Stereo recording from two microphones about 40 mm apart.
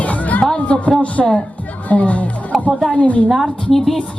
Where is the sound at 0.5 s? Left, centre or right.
Left.